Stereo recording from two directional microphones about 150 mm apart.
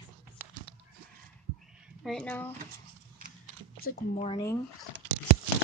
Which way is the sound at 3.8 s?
85° left.